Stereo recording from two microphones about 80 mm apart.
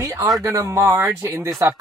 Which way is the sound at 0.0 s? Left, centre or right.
Right.